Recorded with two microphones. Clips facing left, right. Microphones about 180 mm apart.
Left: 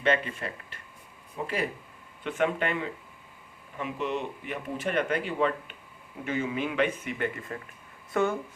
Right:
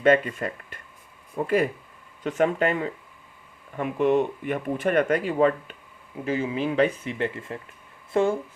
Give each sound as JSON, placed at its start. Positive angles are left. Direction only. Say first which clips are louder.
{"t": 0.0, "sound": "speech", "louder": "right 7 dB", "side_deg": -45}
{"t": 2.2, "sound": "speech", "louder": "right 5 dB", "side_deg": -40}
{"t": 3.8, "sound": "speech", "louder": "right 10 dB", "side_deg": -50}
{"t": 6.2, "sound": "speech", "louder": "right 4 dB", "side_deg": -30}